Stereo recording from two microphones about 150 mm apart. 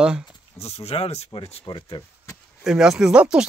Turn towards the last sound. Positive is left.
turn(degrees=-5)  # may be behind; listen again after turning